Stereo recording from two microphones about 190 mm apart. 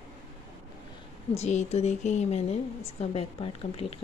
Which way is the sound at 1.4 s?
35° left (ahead or behind).